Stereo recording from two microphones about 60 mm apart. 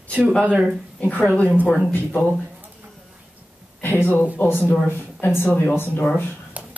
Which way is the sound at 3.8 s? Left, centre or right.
Left.